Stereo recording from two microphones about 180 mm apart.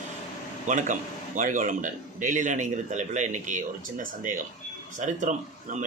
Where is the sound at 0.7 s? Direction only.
45° right (ahead or behind).